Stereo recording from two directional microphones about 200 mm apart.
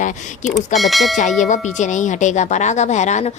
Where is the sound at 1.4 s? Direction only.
35° left (ahead or behind).